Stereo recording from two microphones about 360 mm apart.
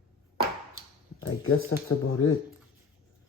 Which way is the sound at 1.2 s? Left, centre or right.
Left.